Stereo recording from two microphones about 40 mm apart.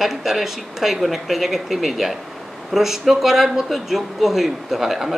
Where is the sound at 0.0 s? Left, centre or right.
Centre.